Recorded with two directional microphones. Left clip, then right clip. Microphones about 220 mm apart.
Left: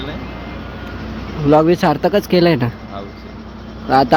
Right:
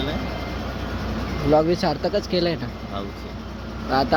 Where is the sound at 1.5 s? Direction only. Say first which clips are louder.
Left 7 dB; 40° left (ahead or behind).